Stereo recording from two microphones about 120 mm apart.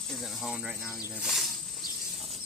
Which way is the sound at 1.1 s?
Centre (ahead or behind).